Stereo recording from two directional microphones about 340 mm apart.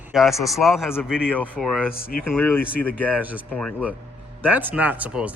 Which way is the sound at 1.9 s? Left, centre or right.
Left.